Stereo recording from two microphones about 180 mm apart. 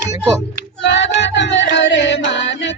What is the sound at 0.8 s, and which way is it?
Music, 75° left (ahead or behind).